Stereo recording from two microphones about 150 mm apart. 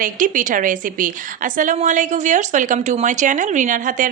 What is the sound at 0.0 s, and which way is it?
A woman's voice, 60° right (ahead or behind).